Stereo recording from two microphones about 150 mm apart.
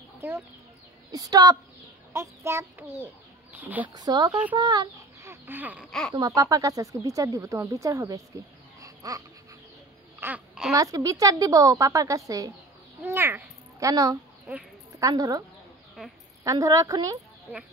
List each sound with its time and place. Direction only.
1.1 s a child's voice: 25° right (ahead or behind)
3.9 s speech: 25° right (ahead or behind)
4.6 s chicken: 25° right (ahead or behind)
5.3 s a sound: 10° right (ahead or behind)
5.9 s speech: 5° left (ahead or behind)
6.1 s speech: 25° right (ahead or behind)
8.8 s babbling: 25° right (ahead or behind)
10.2 s babbling: 5° right (ahead or behind)
10.7 s a woman's voice: 25° right (ahead or behind)
16.4 s speech: 20° right (ahead or behind)